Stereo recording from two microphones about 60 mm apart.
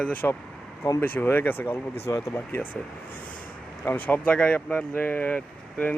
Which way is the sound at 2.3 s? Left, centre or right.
Left.